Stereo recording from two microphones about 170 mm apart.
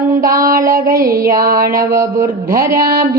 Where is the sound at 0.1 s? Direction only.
55° right (ahead or behind).